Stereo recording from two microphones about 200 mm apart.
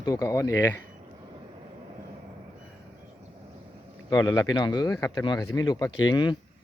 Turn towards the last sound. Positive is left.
turn(degrees=20)  # may be behind; listen again after turning